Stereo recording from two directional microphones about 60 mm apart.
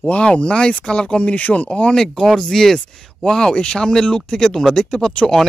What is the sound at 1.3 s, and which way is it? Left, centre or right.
Speech, left.